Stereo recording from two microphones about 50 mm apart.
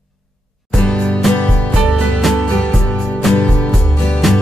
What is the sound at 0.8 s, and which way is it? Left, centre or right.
Music, left.